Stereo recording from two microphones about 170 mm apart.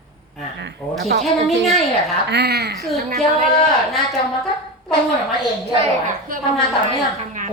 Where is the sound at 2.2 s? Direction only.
75° right (ahead or behind).